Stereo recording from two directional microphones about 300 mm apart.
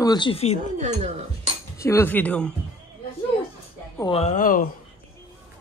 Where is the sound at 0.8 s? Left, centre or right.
Right.